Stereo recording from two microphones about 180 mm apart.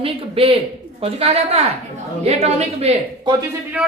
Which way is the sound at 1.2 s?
35° right (ahead or behind).